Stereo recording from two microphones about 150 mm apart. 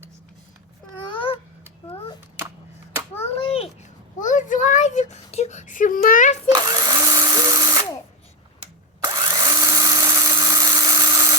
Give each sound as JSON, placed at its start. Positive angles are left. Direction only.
{"t": 1.1, "sound": "babbling", "side_deg": 35}
{"t": 1.9, "sound": "a sound", "side_deg": 35}
{"t": 3.2, "sound": "a sound", "side_deg": 40}
{"t": 4.2, "sound": "whimper", "side_deg": 60}
{"t": 6.5, "sound": "drill", "side_deg": -25}
{"t": 9.1, "sound": "dental drill", "side_deg": -30}